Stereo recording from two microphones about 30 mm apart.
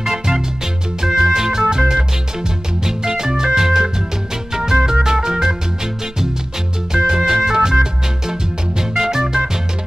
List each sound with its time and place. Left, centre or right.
0.0 s music: centre
4.7 s organ: right
6.9 s music: right